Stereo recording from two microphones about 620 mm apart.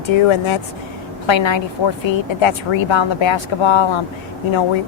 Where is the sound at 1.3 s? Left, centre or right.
Left.